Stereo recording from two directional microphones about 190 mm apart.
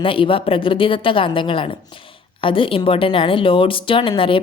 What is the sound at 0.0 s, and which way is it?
A woman's voice, 25° left (ahead or behind).